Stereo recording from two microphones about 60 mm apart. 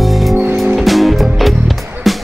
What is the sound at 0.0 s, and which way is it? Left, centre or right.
Music, centre.